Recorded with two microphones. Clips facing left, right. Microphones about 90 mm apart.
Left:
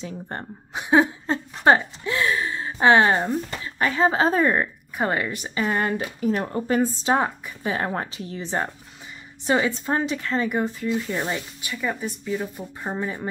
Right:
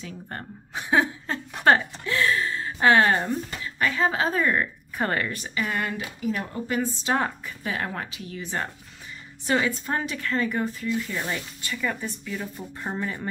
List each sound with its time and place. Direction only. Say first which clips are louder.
0.0 s a woman's voice: left 4 dB; 25° left (ahead or behind)
4.9 s a woman's voice: left 2 dB; 15° left (ahead or behind)
5.5 s speech: left 6 dB; 30° left (ahead or behind)
7.2 s a woman's voice: left 3 dB; 15° left (ahead or behind)
7.6 s speech: left 5 dB; 30° left (ahead or behind)